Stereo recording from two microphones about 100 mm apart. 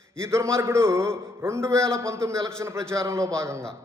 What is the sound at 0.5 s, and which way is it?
A man's voice, 30° right (ahead or behind).